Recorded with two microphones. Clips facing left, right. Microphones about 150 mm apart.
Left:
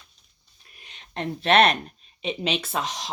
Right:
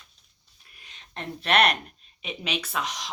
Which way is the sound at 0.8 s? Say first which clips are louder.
Left 6 dB; 25° left (ahead or behind).